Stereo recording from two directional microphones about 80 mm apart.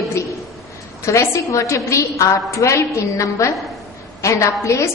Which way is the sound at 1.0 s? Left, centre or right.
Left.